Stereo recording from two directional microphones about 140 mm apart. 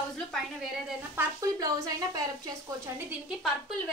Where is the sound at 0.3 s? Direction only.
Centre (ahead or behind).